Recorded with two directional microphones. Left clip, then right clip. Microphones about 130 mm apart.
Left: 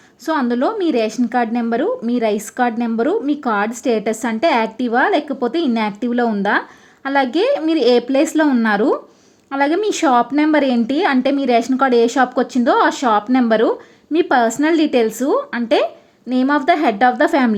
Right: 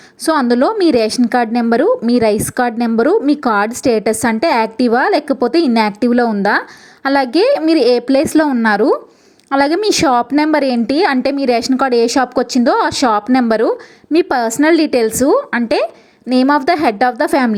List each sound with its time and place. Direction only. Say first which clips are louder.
0.5 s a woman's voice: right 6 dB; 35° right (ahead or behind)